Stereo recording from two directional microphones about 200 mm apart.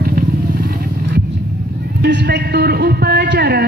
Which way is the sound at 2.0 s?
55° right (ahead or behind).